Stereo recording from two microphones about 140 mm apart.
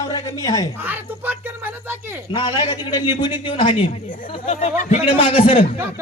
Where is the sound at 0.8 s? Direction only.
15° right (ahead or behind).